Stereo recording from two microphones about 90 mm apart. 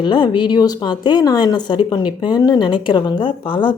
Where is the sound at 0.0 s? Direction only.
60° left (ahead or behind).